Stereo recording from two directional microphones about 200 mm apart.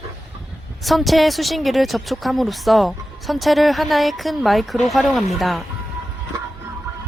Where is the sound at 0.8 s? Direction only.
Centre (ahead or behind).